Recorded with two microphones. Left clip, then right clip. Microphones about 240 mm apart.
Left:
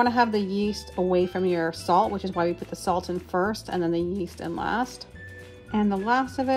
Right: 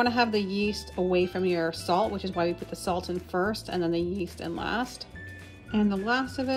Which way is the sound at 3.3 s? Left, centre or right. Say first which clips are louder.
Left 3 dB; centre.